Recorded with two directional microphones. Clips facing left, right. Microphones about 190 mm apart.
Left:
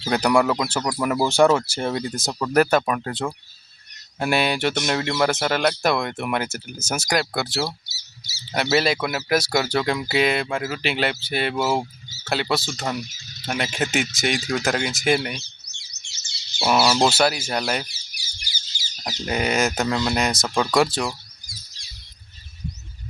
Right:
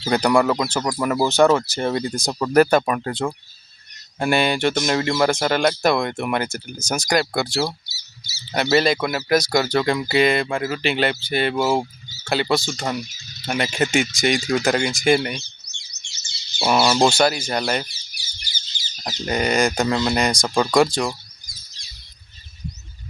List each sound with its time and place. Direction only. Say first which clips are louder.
0.0 s speech: right 2 dB; 5° left (ahead or behind)
15.7 s bird: right 3 dB; 55° left (ahead or behind)
16.6 s speech: right 2 dB; 5° left (ahead or behind)
17.8 s a sound: even; 15° left (ahead or behind)